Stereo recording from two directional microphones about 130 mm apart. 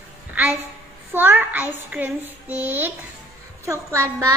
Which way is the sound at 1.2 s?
15° right (ahead or behind).